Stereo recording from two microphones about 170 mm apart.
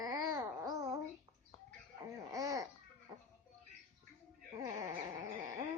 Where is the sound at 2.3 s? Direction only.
20° right (ahead or behind).